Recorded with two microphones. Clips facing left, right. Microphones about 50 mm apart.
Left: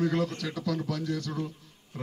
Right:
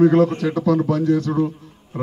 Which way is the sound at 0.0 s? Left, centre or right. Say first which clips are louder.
Right 14 dB; right.